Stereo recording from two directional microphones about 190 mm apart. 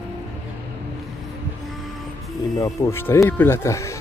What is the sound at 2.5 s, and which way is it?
Speech, 15° left (ahead or behind).